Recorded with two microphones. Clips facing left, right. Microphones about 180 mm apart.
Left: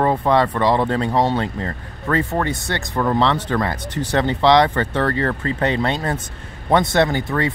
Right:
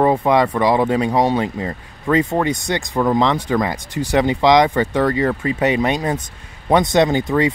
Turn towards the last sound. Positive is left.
turn(degrees=-15)  # may be behind; listen again after turning